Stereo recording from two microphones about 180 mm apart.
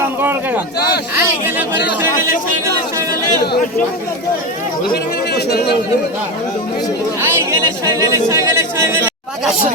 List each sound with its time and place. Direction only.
0.0 s a sound: 10° right (ahead or behind)
1.1 s speech: 10° right (ahead or behind)
3.4 s speech: 65° left (ahead or behind)
4.9 s speech: 65° left (ahead or behind)
7.9 s speech: 20° right (ahead or behind)